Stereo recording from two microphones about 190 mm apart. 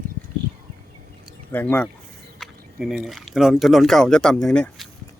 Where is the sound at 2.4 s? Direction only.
Centre (ahead or behind).